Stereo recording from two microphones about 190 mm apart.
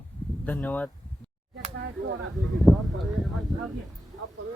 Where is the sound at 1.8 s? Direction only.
75° right (ahead or behind).